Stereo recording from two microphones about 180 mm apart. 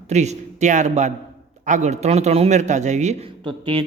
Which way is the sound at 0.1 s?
40° right (ahead or behind).